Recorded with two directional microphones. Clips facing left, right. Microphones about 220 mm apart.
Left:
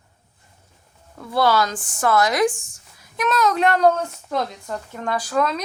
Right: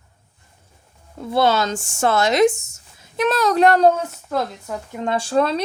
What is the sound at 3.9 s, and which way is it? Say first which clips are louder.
Speech: right 1 dB; 5° right (ahead or behind).